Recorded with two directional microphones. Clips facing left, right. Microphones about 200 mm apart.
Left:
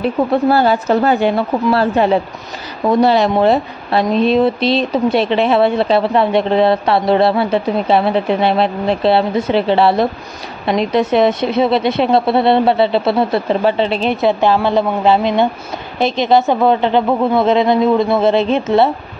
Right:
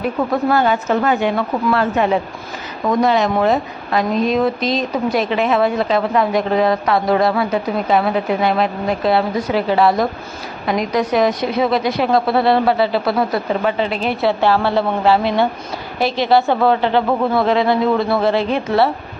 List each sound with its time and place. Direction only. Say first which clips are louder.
0.0 s a woman's voice: left 4 dB; 30° left (ahead or behind)